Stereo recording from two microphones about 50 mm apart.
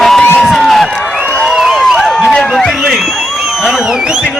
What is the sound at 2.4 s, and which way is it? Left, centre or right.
Speech, centre.